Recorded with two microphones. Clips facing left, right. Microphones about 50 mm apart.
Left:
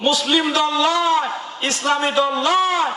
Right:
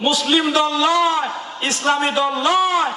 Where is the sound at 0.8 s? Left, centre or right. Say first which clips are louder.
Right 1 dB; centre.